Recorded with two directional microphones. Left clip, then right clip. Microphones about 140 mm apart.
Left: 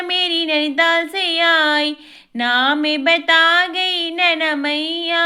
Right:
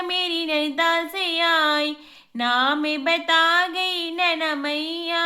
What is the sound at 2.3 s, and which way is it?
Female singing, 25° left (ahead or behind).